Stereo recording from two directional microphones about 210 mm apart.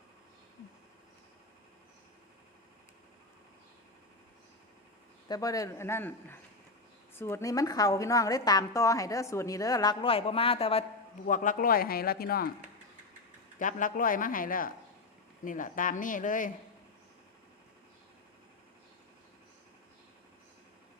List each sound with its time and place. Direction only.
5.3 s a woman's voice: 15° left (ahead or behind)
7.2 s a woman's voice: 10° left (ahead or behind); by 10.8 s 30° left (ahead or behind)
11.3 s speech: 40° left (ahead or behind)
13.6 s speech: 40° left (ahead or behind)